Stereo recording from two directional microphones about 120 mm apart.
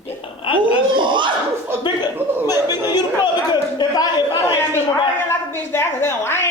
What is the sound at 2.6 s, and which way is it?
Speech, 35° left (ahead or behind).